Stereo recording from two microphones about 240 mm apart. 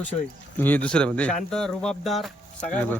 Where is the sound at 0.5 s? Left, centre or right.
Centre.